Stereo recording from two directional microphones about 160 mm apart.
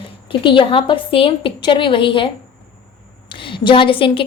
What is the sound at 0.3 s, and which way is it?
A woman's voice, 30° left (ahead or behind).